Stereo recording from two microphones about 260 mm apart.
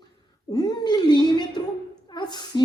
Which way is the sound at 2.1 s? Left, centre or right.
Centre.